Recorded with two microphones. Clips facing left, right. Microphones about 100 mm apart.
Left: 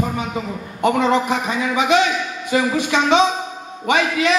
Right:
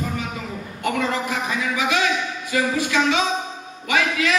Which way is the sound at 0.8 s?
25° left (ahead or behind).